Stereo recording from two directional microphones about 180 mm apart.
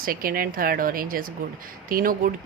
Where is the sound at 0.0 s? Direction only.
50° right (ahead or behind).